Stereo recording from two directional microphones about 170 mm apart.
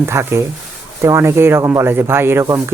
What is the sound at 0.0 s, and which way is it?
Speech, 15° right (ahead or behind).